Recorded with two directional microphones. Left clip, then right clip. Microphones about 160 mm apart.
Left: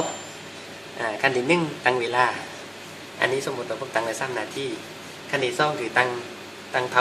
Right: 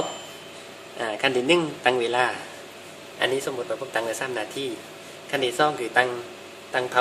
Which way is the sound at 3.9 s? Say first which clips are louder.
Left 2 dB; 50° right (ahead or behind).